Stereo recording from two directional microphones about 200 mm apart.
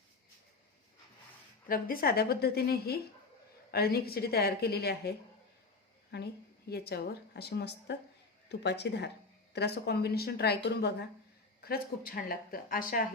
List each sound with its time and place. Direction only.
1.6 s a woman's voice: 45° left (ahead or behind)
6.1 s a woman's voice: 60° left (ahead or behind)